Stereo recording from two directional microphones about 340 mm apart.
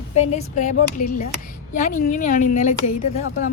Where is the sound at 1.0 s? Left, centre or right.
Left.